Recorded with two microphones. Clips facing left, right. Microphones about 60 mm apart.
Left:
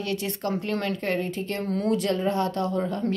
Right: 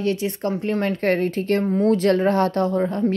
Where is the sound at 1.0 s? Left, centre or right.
Right.